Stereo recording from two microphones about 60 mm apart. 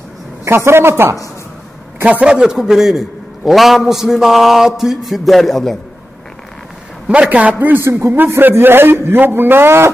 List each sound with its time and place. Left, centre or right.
0.5 s a man's voice: right
2.0 s a man's voice: centre
7.2 s a man's voice: right